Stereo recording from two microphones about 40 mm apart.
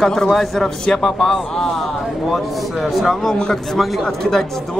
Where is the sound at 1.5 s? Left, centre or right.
Centre.